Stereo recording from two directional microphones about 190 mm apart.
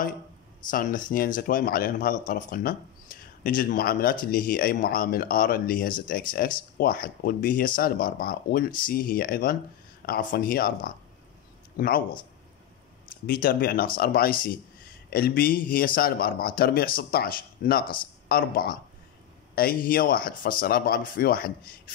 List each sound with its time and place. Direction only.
0.7 s speech: 45° left (ahead or behind)
3.1 s a sound: 50° left (ahead or behind)
3.4 s speech: 50° left (ahead or behind)
13.3 s speech: 50° left (ahead or behind)